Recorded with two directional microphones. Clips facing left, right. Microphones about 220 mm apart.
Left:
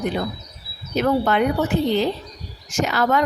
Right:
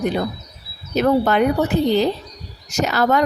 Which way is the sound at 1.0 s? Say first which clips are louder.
Right 3 dB; 40° right (ahead or behind).